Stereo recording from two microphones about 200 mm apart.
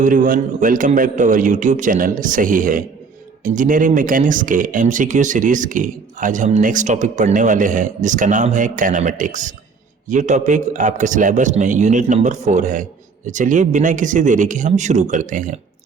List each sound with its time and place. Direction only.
0.0 s speech: 40° right (ahead or behind)